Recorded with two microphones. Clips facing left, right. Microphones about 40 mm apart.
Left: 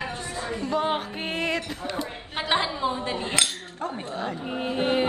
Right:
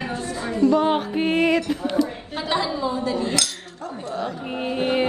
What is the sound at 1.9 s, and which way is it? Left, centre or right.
Chink, left.